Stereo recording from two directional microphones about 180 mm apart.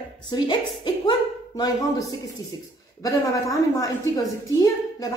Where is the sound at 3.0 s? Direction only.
20° left (ahead or behind).